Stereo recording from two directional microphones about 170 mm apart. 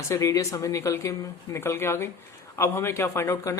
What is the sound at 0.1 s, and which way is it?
Speech, 20° left (ahead or behind).